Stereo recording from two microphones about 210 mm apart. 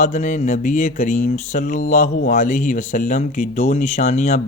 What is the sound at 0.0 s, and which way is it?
Speech, 35° left (ahead or behind).